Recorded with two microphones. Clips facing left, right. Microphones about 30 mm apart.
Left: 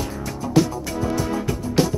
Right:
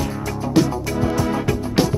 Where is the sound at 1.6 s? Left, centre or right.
Right.